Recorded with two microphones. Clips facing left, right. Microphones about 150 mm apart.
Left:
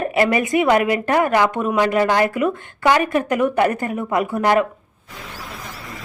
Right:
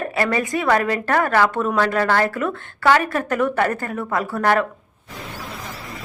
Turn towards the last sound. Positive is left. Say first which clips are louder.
# left 2 dB
turn(degrees=15)  # may be behind; listen again after turning